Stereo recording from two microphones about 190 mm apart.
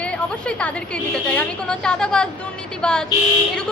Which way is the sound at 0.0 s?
5° left (ahead or behind).